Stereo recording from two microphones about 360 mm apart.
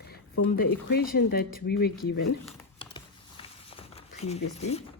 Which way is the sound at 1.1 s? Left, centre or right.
Left.